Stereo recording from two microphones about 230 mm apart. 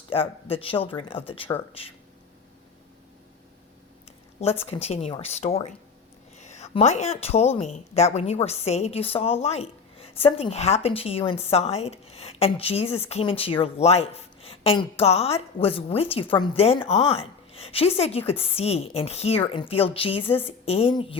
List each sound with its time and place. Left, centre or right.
0.1 s a woman's voice: left
4.4 s a woman's voice: left